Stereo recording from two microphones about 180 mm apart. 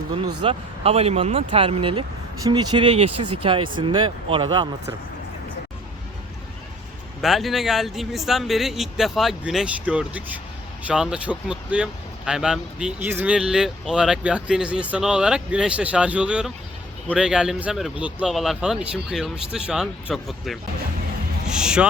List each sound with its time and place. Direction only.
0.4 s speech: 35° right (ahead or behind)
7.2 s speech: centre (ahead or behind)